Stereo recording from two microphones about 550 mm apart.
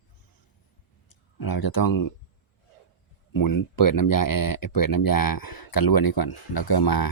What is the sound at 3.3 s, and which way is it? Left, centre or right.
Speech, left.